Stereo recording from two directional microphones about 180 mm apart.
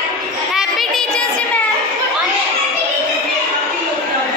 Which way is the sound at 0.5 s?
Centre (ahead or behind).